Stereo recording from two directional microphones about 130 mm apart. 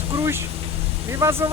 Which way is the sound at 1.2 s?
20° right (ahead or behind).